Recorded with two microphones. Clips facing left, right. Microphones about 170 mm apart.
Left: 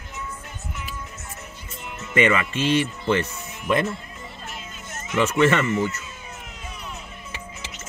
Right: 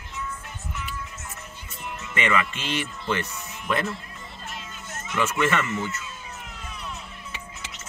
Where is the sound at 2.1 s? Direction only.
35° left (ahead or behind).